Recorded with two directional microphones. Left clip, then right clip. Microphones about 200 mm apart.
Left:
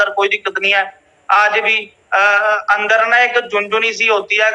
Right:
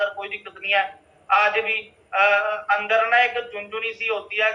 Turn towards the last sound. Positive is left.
turn(degrees=45)  # may be behind; listen again after turning